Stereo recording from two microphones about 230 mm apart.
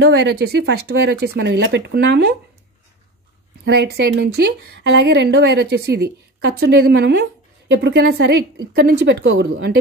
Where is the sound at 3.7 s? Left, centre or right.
Right.